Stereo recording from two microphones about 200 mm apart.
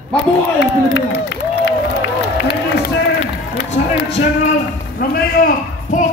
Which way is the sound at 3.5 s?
45° left (ahead or behind).